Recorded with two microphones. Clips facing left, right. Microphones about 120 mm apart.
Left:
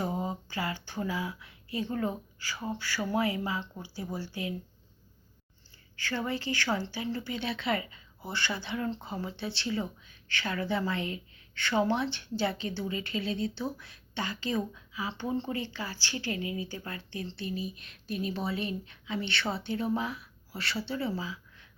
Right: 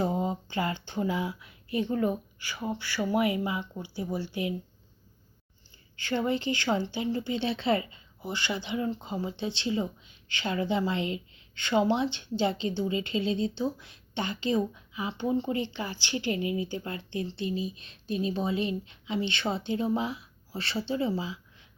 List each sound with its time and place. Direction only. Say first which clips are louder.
0.0 s speech: right 4 dB; 25° right (ahead or behind)
6.0 s speech: right 5 dB; 20° right (ahead or behind)